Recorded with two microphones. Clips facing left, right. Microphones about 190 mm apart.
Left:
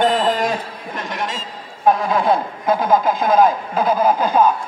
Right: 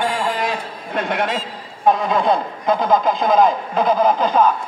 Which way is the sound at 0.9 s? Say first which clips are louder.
Right 6 dB; 60° right (ahead or behind).